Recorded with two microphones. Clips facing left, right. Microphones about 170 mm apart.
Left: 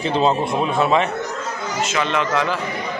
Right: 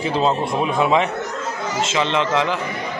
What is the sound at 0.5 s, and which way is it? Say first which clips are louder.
Speech: even; 15° right (ahead or behind).